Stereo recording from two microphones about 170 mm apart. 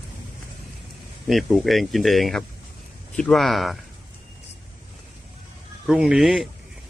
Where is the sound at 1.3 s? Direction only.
Centre (ahead or behind).